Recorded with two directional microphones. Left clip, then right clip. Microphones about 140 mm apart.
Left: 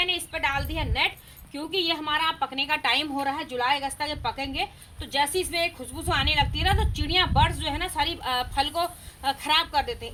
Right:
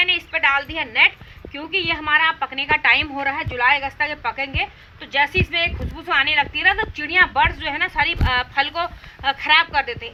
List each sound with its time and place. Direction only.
0.0 s a woman's voice: 50° left (ahead or behind)